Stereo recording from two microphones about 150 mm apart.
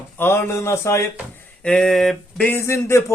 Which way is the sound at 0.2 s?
15° left (ahead or behind).